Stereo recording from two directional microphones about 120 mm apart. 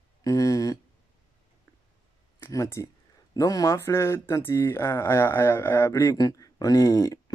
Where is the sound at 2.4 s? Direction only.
25° left (ahead or behind).